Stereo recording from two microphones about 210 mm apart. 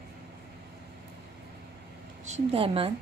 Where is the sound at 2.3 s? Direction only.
25° right (ahead or behind).